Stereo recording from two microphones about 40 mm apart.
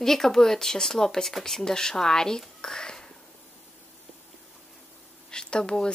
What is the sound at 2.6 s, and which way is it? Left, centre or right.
Whispering, centre.